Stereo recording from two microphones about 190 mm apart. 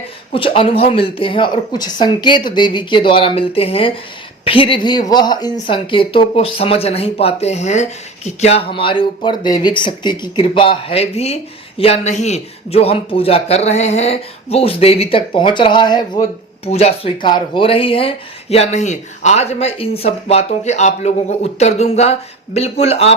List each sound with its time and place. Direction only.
0.3 s a woman's voice: 30° left (ahead or behind)
16.6 s speech: 35° left (ahead or behind)